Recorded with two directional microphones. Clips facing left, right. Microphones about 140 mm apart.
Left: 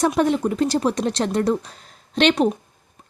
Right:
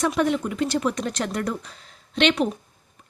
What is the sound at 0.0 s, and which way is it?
A woman's voice, 35° left (ahead or behind).